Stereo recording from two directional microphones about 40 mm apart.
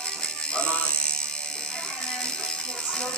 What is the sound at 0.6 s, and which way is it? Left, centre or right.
Electric shaver, left.